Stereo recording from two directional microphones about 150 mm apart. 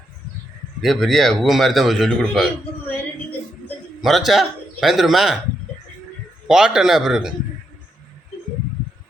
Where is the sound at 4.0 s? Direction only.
Centre (ahead or behind).